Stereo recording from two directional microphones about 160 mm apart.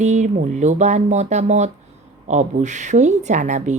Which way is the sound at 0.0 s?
50° right (ahead or behind).